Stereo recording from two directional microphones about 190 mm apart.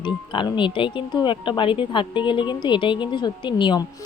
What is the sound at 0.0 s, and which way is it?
Speech, 25° left (ahead or behind).